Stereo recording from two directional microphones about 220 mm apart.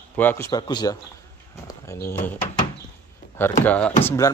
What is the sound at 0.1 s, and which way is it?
A man's voice, 10° left (ahead or behind).